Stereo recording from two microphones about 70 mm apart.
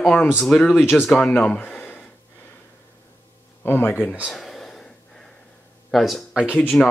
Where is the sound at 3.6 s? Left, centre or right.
Left.